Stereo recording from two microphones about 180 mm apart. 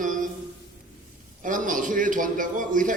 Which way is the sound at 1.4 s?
45° right (ahead or behind).